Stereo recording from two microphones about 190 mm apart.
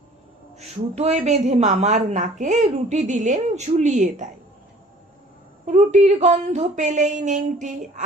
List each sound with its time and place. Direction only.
0.9 s a woman's voice: 35° right (ahead or behind)
5.6 s a woman's voice: 40° right (ahead or behind)